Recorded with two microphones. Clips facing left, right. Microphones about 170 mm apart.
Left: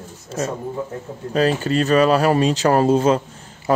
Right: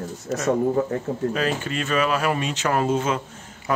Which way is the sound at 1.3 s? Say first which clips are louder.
Left 6 dB; 35° left (ahead or behind).